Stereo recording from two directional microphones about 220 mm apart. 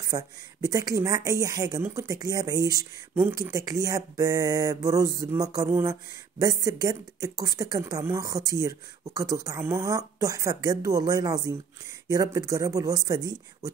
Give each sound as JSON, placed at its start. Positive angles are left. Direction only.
{"t": 0.0, "sound": "speech", "side_deg": -15}